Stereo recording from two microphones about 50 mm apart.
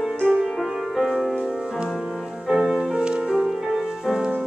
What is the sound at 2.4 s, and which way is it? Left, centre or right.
Music, centre.